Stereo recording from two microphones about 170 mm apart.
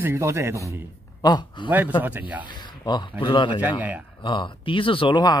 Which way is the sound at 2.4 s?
25° left (ahead or behind).